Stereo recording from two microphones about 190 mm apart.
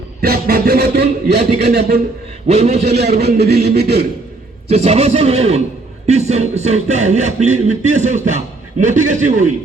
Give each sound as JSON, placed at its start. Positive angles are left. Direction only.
{"t": 0.2, "sound": "a sound", "side_deg": -50}
{"t": 2.5, "sound": "music", "side_deg": -35}
{"t": 2.9, "sound": "speech", "side_deg": -55}
{"t": 4.7, "sound": "music", "side_deg": -35}